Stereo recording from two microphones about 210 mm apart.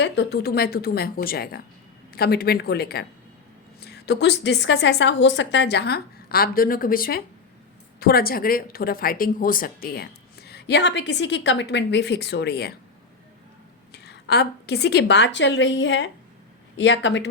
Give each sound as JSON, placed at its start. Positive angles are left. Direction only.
{"t": 0.0, "sound": "speech", "side_deg": 50}
{"t": 13.9, "sound": "a woman's voice", "side_deg": 50}